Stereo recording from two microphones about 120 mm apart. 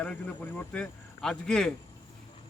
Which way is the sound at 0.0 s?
10° left (ahead or behind).